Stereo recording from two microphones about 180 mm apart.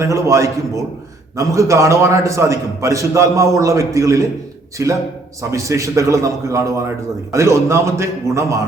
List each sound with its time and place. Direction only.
0.0 s a man's voice: 15° right (ahead or behind)